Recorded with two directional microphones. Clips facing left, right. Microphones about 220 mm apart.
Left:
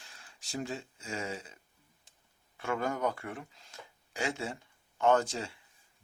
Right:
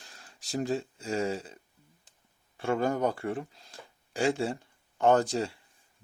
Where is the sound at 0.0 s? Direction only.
40° right (ahead or behind).